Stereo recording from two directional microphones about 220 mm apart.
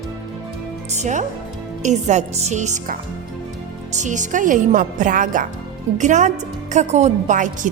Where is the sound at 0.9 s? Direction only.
30° right (ahead or behind).